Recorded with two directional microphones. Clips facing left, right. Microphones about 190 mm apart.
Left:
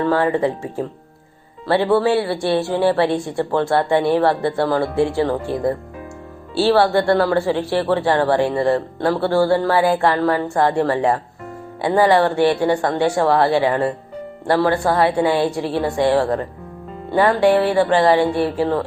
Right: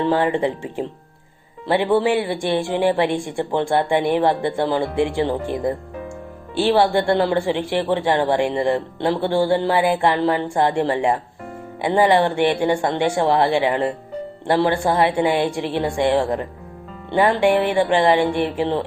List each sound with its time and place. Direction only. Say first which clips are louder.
0.0 s speech: left 1 dB; 25° right (ahead or behind)